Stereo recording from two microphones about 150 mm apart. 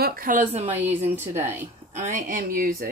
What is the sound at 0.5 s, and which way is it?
Speech, 45° right (ahead or behind).